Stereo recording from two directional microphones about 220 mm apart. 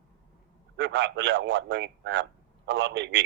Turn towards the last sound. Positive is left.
turn(degrees=-55)  # may be behind; listen again after turning